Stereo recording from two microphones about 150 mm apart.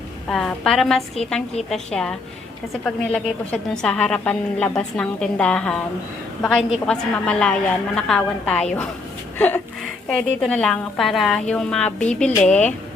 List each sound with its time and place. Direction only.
0.3 s a woman's voice: 5° left (ahead or behind)
10.1 s a woman's voice: 5° left (ahead or behind)